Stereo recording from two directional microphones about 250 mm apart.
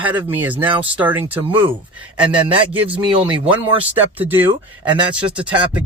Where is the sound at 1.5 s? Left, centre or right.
Centre.